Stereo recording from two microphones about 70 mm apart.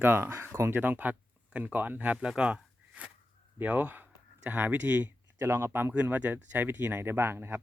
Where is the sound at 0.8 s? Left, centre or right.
Right.